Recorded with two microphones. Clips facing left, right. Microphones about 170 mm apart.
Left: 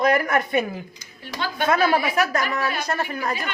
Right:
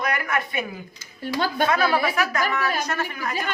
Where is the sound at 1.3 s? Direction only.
40° right (ahead or behind).